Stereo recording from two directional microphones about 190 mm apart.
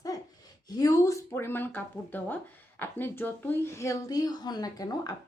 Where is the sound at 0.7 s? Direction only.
20° left (ahead or behind).